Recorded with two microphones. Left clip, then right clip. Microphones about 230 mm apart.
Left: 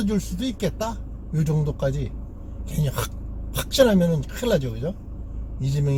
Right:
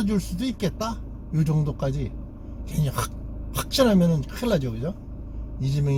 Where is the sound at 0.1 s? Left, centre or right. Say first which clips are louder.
Left 1 dB; centre.